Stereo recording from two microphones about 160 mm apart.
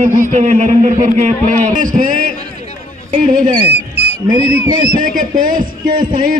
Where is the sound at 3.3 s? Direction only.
55° right (ahead or behind).